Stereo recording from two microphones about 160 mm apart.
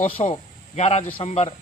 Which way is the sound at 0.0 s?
40° left (ahead or behind).